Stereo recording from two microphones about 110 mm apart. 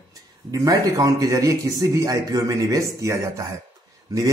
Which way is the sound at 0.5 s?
30° right (ahead or behind).